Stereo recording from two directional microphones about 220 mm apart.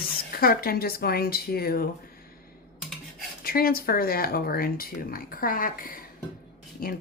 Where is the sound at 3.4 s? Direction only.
40° left (ahead or behind).